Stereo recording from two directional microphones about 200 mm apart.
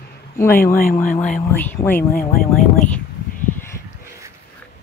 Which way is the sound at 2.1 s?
45° left (ahead or behind).